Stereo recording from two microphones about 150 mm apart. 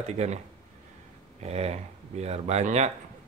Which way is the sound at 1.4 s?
45° right (ahead or behind).